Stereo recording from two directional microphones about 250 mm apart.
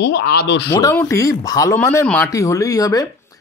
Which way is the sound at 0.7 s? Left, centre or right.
Centre.